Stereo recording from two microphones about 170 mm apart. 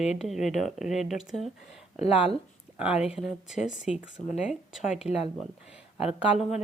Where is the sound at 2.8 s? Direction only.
5° right (ahead or behind).